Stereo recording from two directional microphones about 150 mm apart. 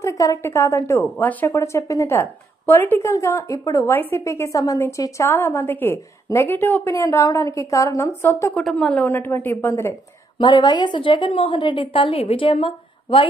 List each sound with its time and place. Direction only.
0.0 s a woman's voice: 20° left (ahead or behind)
8.6 s a woman's voice: 5° left (ahead or behind)
10.4 s a woman's voice: 30° left (ahead or behind)